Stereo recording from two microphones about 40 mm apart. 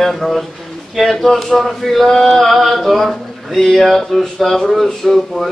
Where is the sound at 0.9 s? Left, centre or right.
Centre.